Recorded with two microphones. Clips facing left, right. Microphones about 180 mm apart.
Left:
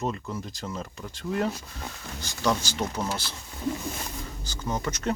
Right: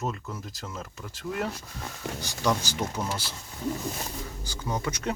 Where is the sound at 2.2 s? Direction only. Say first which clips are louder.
Left 1 dB; 10° right (ahead or behind).